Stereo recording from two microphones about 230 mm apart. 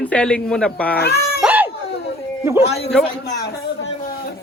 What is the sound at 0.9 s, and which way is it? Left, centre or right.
Speech, left.